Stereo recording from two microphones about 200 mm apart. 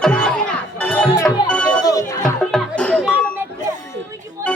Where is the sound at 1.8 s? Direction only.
15° left (ahead or behind).